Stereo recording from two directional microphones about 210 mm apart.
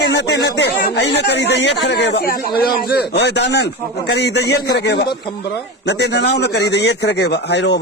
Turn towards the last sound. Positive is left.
turn(degrees=55)  # may be behind; listen again after turning